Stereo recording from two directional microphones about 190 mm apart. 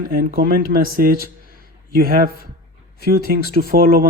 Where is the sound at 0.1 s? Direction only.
50° right (ahead or behind).